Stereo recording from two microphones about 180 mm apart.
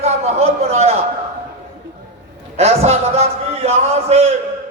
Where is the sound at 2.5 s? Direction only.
35° right (ahead or behind).